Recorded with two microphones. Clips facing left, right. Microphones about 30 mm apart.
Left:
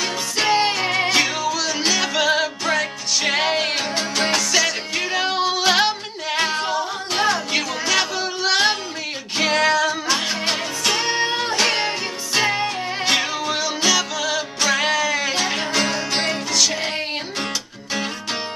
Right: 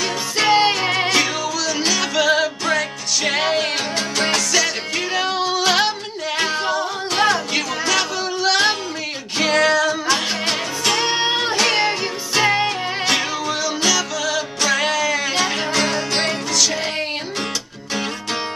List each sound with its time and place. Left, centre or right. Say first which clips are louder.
0.5 s music: right 3 dB; centre
0.7 s music: right 1 dB; centre
11.5 s music: right 2 dB; centre
13.0 s music: left 1 dB; centre